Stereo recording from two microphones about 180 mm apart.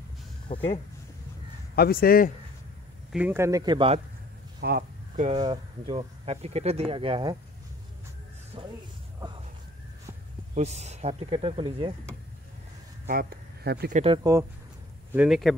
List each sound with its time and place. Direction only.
0.5 s speech: 35° left (ahead or behind)
1.8 s speech: 55° left (ahead or behind)
3.1 s speech: 10° right (ahead or behind); by 4.0 s 30° right (ahead or behind)
4.6 s speech: 60° right (ahead or behind)
5.3 s speech: 25° right (ahead or behind)
10.5 s speech: 40° right (ahead or behind)
13.1 s speech: 55° right (ahead or behind)
13.9 s speech: 30° right (ahead or behind)
15.1 s speech: centre (ahead or behind)